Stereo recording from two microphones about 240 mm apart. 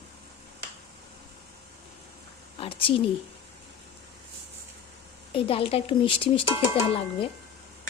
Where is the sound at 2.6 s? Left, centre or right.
Left.